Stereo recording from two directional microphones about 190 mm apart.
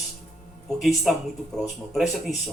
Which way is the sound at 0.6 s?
Centre (ahead or behind).